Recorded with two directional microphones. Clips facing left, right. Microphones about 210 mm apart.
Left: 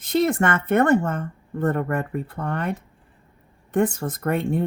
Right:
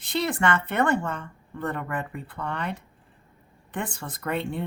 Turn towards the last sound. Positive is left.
turn(degrees=45)  # may be behind; listen again after turning